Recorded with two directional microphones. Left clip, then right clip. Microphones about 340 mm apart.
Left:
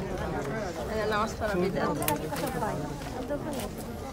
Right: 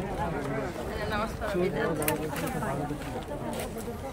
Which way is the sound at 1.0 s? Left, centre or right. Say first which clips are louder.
Left 4 dB; centre.